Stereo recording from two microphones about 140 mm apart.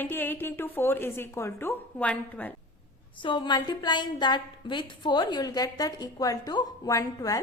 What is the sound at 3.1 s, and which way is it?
A woman's voice, 35° left (ahead or behind).